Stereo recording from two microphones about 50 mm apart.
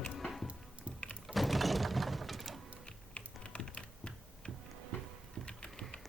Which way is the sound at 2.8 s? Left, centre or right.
Centre.